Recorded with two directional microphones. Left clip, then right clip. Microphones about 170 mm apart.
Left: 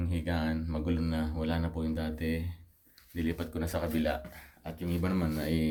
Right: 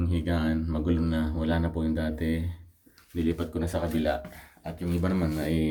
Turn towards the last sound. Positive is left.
turn(degrees=25)  # may be behind; listen again after turning